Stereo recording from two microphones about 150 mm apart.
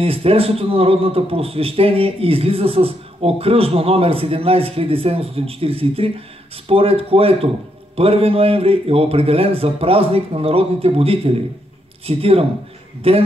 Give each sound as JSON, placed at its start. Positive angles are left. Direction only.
{"t": 0.0, "sound": "a man's voice", "side_deg": -40}